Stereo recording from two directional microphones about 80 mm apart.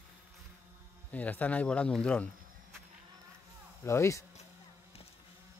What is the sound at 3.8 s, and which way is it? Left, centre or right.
Speech, left.